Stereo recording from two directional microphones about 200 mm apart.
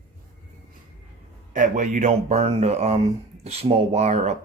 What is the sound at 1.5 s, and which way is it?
Speech, 40° right (ahead or behind).